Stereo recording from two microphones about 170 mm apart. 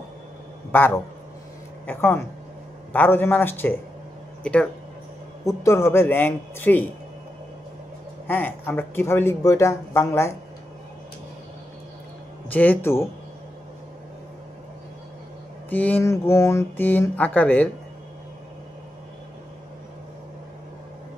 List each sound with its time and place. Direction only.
0.7 s a man's voice: 10° left (ahead or behind)
5.4 s speech: 20° left (ahead or behind)
8.3 s speech: 10° left (ahead or behind)
12.4 s speech: 10° left (ahead or behind)
15.7 s speech: 10° left (ahead or behind)